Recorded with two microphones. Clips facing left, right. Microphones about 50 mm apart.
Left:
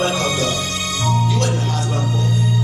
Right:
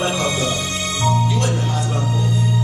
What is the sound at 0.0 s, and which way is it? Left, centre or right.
Music, centre.